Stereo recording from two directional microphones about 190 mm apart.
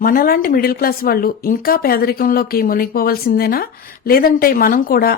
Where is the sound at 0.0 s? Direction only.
50° left (ahead or behind).